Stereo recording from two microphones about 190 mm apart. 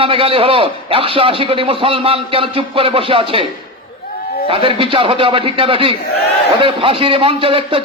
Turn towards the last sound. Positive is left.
turn(degrees=-30)  # may be behind; listen again after turning